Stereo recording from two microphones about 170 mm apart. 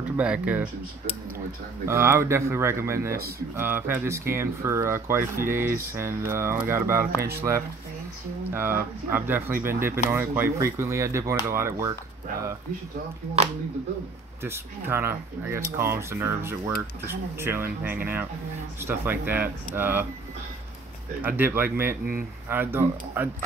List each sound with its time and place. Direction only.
0.2 s speech: 10° right (ahead or behind)
1.9 s speech: 15° right (ahead or behind)
3.2 s speech: 65° right (ahead or behind)
3.5 s speech: 10° right (ahead or behind)
14.4 s speech: 15° right (ahead or behind)
21.2 s speech: 15° right (ahead or behind)